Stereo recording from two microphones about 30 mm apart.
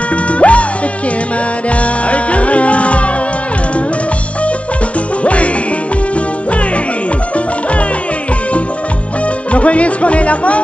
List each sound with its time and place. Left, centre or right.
0.1 s music: left
1.7 s music: left
5.2 s music: left
9.5 s music: left